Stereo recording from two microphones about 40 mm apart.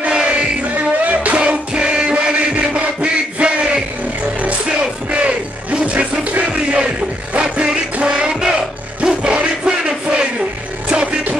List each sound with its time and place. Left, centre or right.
0.0 s music: right
0.7 s music: right
1.4 s music: right
9.0 s crowd: right
10.9 s music: right